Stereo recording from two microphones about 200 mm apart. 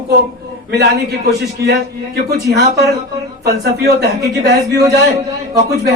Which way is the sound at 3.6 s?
55° right (ahead or behind).